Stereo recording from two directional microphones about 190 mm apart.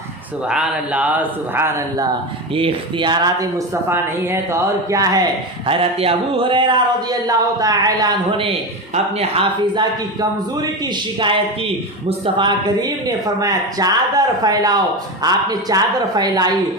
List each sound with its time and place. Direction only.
0.4 s speech: 5° right (ahead or behind)
2.6 s speech: 25° right (ahead or behind)
5.6 s a man's voice: 30° right (ahead or behind)
12.0 s speech: 30° right (ahead or behind)